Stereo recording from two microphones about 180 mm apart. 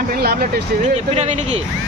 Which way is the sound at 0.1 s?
60° right (ahead or behind).